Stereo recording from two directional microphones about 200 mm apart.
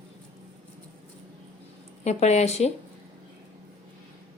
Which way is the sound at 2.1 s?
35° left (ahead or behind).